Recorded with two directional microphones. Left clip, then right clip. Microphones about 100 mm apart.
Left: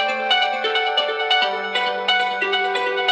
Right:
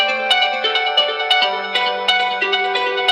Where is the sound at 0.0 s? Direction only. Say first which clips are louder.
Right 3 dB; 45° right (ahead or behind).